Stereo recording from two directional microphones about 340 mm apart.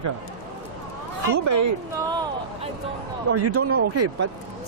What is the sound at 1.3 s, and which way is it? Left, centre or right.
Speech, right.